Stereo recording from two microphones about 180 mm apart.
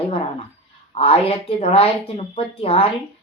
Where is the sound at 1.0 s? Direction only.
35° left (ahead or behind).